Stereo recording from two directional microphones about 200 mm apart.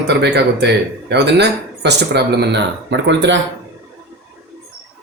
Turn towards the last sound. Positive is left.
turn(degrees=-60)  # may be behind; listen again after turning